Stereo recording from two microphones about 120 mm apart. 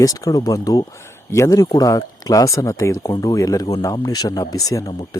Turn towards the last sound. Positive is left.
turn(degrees=30)  # may be behind; listen again after turning